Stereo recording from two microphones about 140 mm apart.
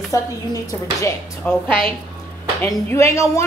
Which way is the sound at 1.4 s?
10° left (ahead or behind).